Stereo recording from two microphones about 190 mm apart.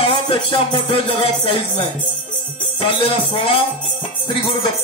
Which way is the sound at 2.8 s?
30° left (ahead or behind).